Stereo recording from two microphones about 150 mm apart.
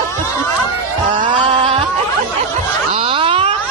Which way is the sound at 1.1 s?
35° right (ahead or behind).